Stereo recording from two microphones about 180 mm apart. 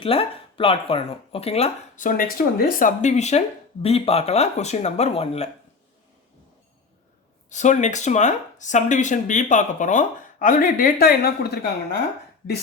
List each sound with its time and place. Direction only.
0.0 s speech: 30° left (ahead or behind)
7.5 s speech: 40° left (ahead or behind); by 11.9 s 60° left (ahead or behind)